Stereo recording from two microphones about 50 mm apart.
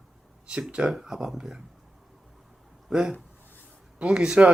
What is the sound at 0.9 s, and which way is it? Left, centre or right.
Speech, centre.